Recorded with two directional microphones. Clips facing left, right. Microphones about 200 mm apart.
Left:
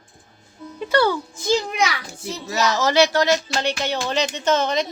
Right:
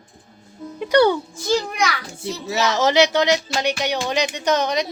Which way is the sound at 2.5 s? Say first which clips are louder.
Right 1 dB; 20° right (ahead or behind).